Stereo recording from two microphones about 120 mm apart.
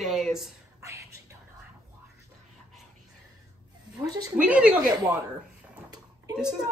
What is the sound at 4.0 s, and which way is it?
Speech, 30° right (ahead or behind).